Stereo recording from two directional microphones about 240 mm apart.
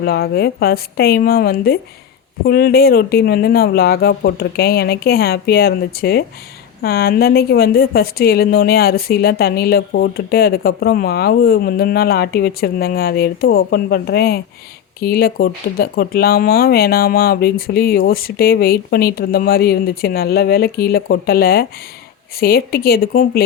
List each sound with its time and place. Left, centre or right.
0.0 s a woman's voice: left